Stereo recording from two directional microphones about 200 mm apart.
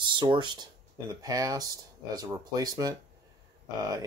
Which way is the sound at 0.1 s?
25° right (ahead or behind).